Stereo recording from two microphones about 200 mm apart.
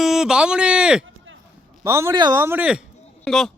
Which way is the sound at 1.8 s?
15° right (ahead or behind).